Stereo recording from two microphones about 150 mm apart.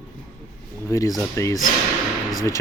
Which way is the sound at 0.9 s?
20° left (ahead or behind).